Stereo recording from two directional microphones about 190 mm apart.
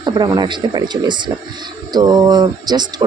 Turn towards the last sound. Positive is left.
turn(degrees=-20)  # may be behind; listen again after turning